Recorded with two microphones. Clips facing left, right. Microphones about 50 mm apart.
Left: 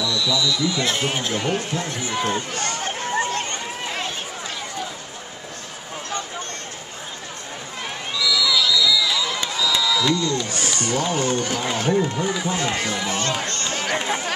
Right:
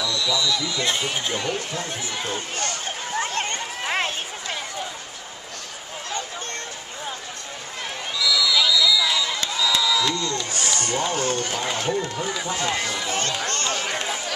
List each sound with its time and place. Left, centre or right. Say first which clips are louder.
0.0 s a sound: left 2 dB; centre
0.7 s speech: left 2 dB; centre
1.4 s speech: left 3 dB; left
3.2 s run: right 1 dB; right
8.2 s a sound: even; centre
10.5 s speech: left 2 dB; centre
13.2 s speech: left 2 dB; left
13.5 s run: right 1 dB; right
14.0 s chatter: left 4 dB; left